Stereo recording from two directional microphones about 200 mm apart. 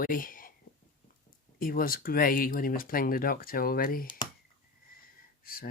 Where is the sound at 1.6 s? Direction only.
45° left (ahead or behind).